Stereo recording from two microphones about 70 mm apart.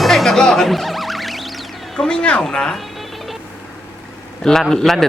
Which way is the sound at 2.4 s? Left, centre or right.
Centre.